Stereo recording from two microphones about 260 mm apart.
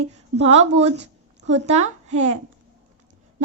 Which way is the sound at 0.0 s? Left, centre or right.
Right.